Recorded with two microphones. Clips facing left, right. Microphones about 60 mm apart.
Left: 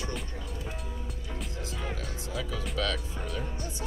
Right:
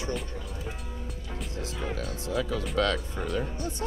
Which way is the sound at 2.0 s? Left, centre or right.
Right.